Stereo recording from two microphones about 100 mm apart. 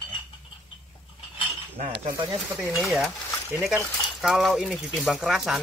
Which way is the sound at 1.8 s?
60° right (ahead or behind).